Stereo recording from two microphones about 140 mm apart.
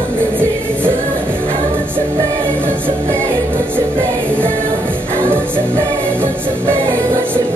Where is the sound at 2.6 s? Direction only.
15° right (ahead or behind).